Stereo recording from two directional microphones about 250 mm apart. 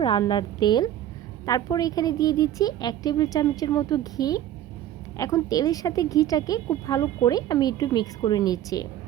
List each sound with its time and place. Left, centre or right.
0.0 s speech: centre